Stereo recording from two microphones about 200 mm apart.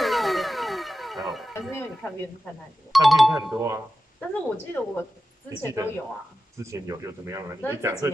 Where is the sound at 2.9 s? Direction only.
Centre (ahead or behind).